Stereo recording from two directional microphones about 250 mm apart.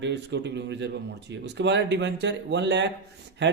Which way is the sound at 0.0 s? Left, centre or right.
Right.